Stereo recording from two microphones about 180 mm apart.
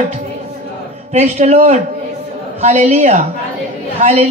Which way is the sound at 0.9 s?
35° right (ahead or behind).